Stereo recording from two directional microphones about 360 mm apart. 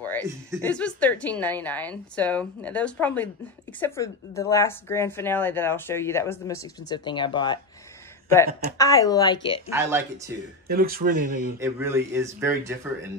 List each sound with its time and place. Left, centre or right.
0.0 s a woman's voice: centre
8.7 s a woman's voice: centre
9.7 s speech: centre
10.7 s speech: right
11.6 s speech: centre